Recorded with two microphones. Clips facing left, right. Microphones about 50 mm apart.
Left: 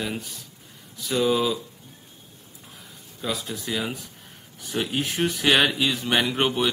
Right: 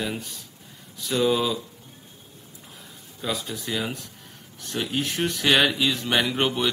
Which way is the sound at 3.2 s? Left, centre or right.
Centre.